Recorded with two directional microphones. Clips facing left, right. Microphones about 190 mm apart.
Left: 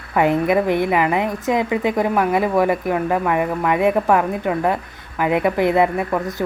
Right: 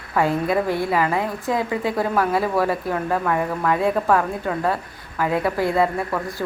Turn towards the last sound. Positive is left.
turn(degrees=20)  # may be behind; listen again after turning